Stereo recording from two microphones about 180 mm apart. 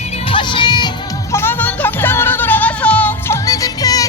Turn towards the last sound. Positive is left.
turn(degrees=20)  # may be behind; listen again after turning